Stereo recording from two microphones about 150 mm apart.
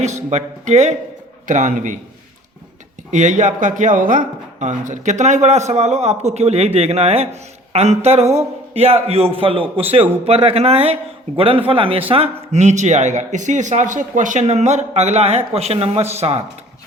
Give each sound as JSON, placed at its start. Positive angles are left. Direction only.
{"t": 0.0, "sound": "a man's voice", "side_deg": -50}
{"t": 3.1, "sound": "speech", "side_deg": -55}